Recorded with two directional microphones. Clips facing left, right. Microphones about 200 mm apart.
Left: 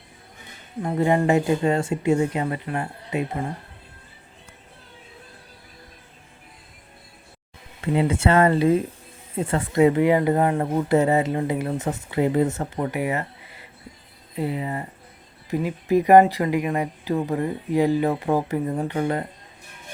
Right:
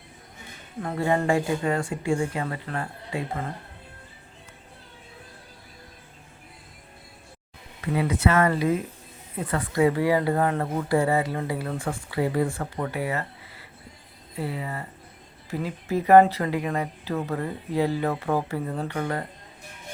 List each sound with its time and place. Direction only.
0.8 s speech: 20° left (ahead or behind)
7.8 s speech: 30° left (ahead or behind)